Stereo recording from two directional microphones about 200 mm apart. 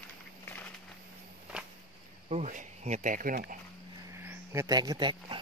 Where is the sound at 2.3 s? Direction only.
35° right (ahead or behind).